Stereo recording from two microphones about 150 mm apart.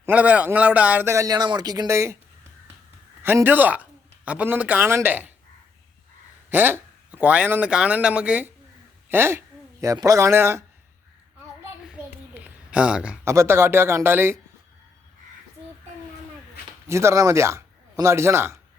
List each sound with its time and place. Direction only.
0.0 s a man's voice: 10° right (ahead or behind)
6.5 s a man's voice: 15° right (ahead or behind)
11.9 s a sound: 10° right (ahead or behind)
13.2 s a man's voice: 20° right (ahead or behind)
16.9 s speech: 20° right (ahead or behind)